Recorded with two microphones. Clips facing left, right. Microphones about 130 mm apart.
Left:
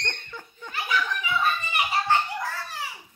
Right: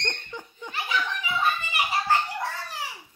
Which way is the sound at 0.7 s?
25° right (ahead or behind).